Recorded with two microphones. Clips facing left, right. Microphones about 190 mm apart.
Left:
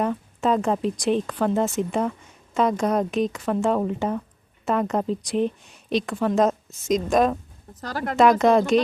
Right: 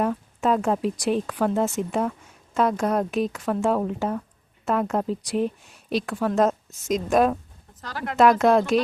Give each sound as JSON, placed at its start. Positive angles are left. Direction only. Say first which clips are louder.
{"t": 0.0, "sound": "speech", "louder": "even", "side_deg": 0}
{"t": 7.8, "sound": "speech", "louder": "left 4 dB", "side_deg": 40}
{"t": 8.2, "sound": "speech", "louder": "left 1 dB", "side_deg": 0}